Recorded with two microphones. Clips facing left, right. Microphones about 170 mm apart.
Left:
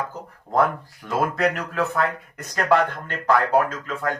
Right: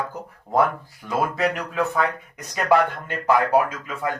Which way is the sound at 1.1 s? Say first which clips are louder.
Left 1 dB; centre (ahead or behind).